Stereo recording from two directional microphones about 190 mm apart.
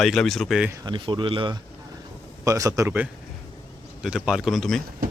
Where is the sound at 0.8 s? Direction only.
25° right (ahead or behind).